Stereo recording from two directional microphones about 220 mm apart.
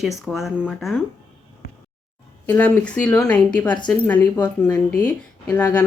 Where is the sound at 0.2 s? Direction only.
Centre (ahead or behind).